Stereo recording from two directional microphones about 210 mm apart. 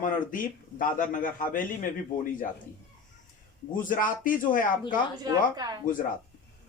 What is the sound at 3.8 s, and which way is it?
Speech, 40° left (ahead or behind).